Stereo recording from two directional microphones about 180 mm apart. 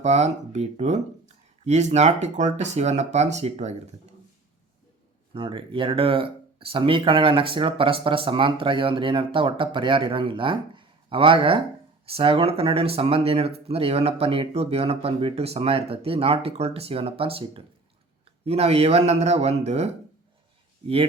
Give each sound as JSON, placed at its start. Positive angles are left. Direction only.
{"t": 0.0, "sound": "speech", "side_deg": -40}
{"t": 5.3, "sound": "speech", "side_deg": -25}